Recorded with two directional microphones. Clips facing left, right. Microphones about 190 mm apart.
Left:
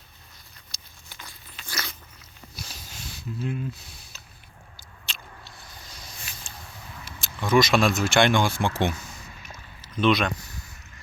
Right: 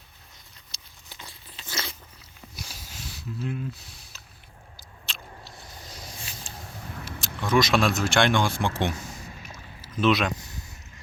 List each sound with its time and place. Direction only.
0.7 s biting: 25° right (ahead or behind)
1.2 s crunch: 30° right (ahead or behind)
2.6 s a sound: 10° right (ahead or behind)
4.8 s biting: centre (ahead or behind)
6.4 s a sound: 45° right (ahead or behind)
7.4 s speech: centre (ahead or behind)
9.0 s boat: 35° right (ahead or behind)
9.9 s speech: 5° right (ahead or behind)